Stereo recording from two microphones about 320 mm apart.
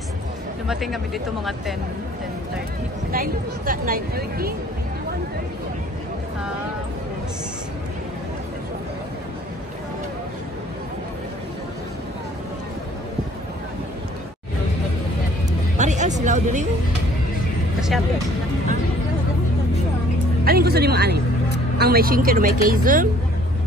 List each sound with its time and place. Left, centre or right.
0.7 s speech: centre
3.1 s speech: right
15.8 s music: right
16.2 s a sound: right
20.4 s speech: right